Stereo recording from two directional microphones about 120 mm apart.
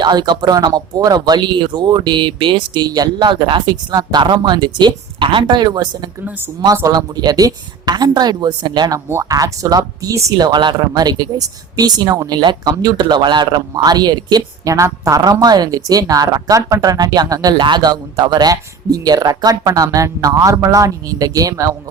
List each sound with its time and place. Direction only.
0.0 s speech: 35° right (ahead or behind)
6.2 s speech: 15° right (ahead or behind)
6.9 s speech: 35° right (ahead or behind)
9.0 s speech: 25° right (ahead or behind)